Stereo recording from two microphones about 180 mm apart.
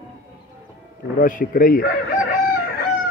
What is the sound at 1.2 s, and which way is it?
Speech, 50° left (ahead or behind).